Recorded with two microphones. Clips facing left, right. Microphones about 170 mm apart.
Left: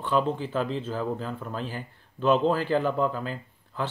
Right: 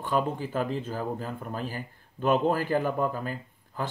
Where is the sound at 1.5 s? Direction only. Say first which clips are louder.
Even; 50° right (ahead or behind).